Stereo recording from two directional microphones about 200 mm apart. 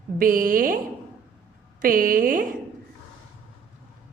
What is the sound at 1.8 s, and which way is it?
Speech, 45° right (ahead or behind).